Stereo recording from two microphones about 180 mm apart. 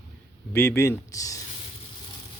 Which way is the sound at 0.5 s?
15° left (ahead or behind).